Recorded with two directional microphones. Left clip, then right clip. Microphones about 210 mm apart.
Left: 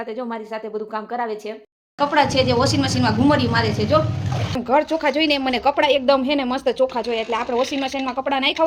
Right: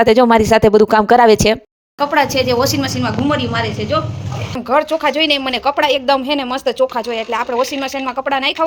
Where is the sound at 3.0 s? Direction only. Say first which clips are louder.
Left 2 dB; 15° left (ahead or behind).